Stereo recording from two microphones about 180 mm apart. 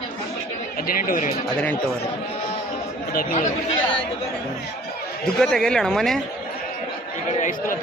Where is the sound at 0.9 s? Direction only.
50° left (ahead or behind).